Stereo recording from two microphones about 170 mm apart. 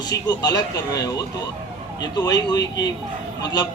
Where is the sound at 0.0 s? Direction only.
25° left (ahead or behind).